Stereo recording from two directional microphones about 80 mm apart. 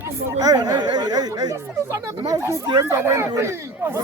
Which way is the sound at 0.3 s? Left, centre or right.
Right.